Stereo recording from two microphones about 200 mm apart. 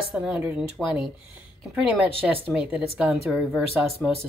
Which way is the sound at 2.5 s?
5° right (ahead or behind).